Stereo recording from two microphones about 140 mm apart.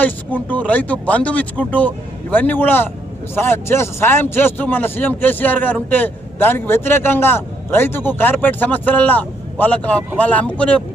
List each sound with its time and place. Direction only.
0.0 s speech: 10° left (ahead or behind)